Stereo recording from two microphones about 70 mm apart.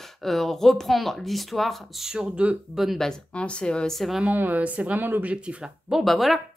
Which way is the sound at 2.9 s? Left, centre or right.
Centre.